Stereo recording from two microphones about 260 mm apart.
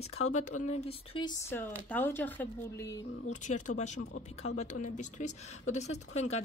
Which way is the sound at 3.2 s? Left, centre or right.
Left.